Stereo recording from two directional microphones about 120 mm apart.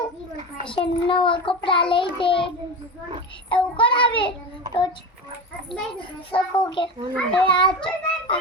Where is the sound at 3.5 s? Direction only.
45° left (ahead or behind).